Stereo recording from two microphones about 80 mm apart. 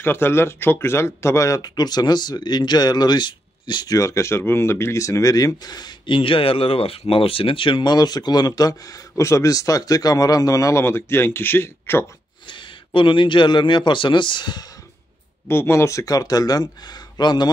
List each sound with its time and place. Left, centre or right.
0.0 s speech: left
7.0 s speech: left
7.4 s speech: left
12.4 s a man's voice: left
15.4 s speech: left